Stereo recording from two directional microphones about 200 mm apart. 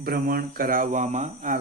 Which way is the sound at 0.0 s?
50° right (ahead or behind).